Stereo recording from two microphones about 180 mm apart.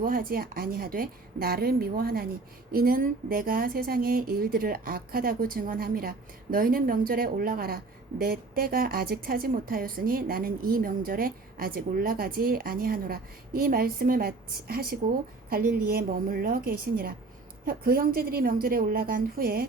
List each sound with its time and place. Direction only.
0.0 s a woman's voice: 55° right (ahead or behind)